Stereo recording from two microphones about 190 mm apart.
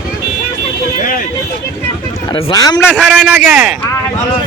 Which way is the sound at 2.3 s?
20° left (ahead or behind).